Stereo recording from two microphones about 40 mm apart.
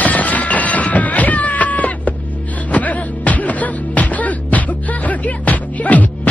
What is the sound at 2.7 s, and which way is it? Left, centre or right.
Music, left.